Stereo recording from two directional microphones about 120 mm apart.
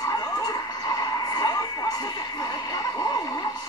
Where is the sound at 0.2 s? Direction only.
30° left (ahead or behind).